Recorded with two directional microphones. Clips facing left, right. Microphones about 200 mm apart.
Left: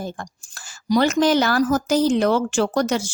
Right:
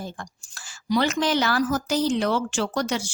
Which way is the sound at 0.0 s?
50° left (ahead or behind).